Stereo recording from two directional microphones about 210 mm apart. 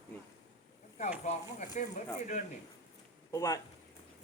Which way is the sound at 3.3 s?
15° left (ahead or behind).